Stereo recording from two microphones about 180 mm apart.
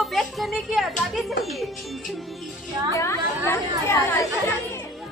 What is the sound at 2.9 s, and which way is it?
Speech, 15° left (ahead or behind).